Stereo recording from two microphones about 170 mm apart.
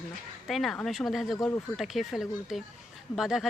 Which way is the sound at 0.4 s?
Centre (ahead or behind).